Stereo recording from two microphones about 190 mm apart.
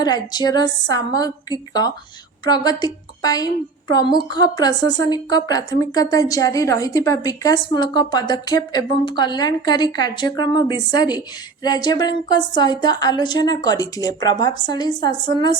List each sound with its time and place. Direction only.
0.0 s a woman's voice: 20° left (ahead or behind)